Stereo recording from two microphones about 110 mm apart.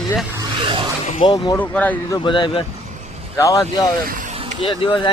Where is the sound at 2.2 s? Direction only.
50° left (ahead or behind).